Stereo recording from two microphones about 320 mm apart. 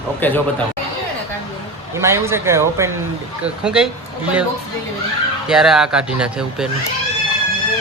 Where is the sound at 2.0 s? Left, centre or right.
Centre.